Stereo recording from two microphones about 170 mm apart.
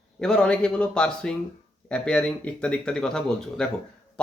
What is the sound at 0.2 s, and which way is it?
Speech, 5° left (ahead or behind).